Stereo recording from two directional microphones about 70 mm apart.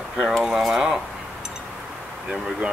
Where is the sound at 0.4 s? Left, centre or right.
Centre.